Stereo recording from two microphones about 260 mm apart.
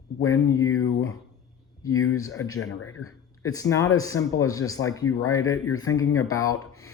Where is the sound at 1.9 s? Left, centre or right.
Left.